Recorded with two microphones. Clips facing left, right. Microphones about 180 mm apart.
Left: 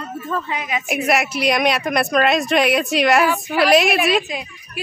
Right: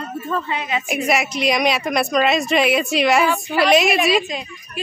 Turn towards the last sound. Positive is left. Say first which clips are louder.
# even
turn(degrees=10)  # may be behind; listen again after turning